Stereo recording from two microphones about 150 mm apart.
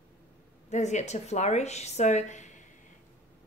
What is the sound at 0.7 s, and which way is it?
Speech, 50° left (ahead or behind).